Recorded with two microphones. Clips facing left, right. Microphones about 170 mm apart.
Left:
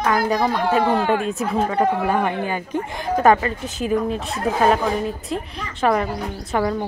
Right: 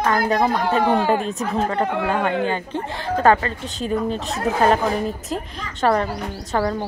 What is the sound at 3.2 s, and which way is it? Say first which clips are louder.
A woman's voice: left 1 dB; 15° left (ahead or behind).